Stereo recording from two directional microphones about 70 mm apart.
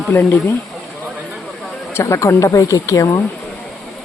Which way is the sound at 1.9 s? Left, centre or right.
Left.